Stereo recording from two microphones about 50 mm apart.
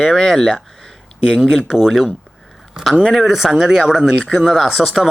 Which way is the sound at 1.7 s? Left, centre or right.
Centre.